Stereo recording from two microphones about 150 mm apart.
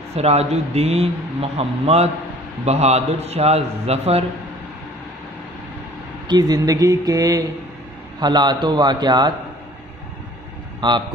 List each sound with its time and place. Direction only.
0.2 s a man's voice: 45° right (ahead or behind)
6.2 s speech: 25° right (ahead or behind)
10.8 s speech: 30° right (ahead or behind)